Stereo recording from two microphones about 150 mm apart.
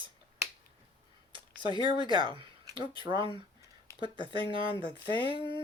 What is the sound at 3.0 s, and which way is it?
Speech, 30° right (ahead or behind).